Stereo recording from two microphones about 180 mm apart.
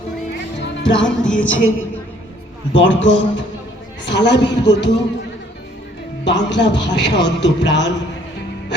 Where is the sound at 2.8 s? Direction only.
90° left.